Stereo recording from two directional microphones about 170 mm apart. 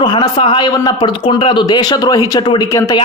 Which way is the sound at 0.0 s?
25° left (ahead or behind).